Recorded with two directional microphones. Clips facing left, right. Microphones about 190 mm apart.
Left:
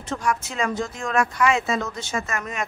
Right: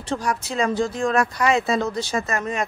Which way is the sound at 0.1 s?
35° right (ahead or behind).